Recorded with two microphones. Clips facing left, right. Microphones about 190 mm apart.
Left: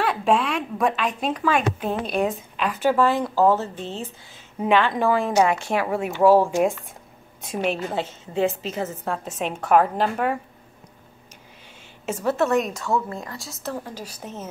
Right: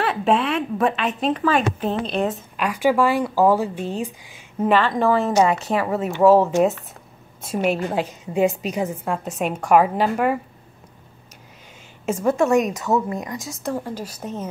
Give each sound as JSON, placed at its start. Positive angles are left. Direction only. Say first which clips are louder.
{"t": 0.0, "sound": "a woman's voice", "louder": "right 1 dB", "side_deg": 0}
{"t": 4.6, "sound": "speech", "louder": "right 2 dB", "side_deg": 0}
{"t": 7.5, "sound": "a woman's voice", "louder": "right 3 dB", "side_deg": -10}
{"t": 12.1, "sound": "a woman's voice", "louder": "right 3 dB", "side_deg": -10}